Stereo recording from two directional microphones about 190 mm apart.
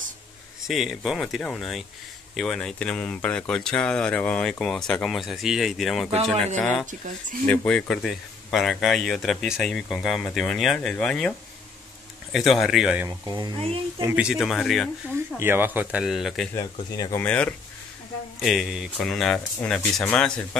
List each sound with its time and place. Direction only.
0.7 s speech: centre (ahead or behind)
13.3 s speech: 25° right (ahead or behind)
14.0 s speech: 5° right (ahead or behind)
15.3 s speech: 10° right (ahead or behind)
16.9 s speech: 20° left (ahead or behind)
17.2 s speech: 5° left (ahead or behind)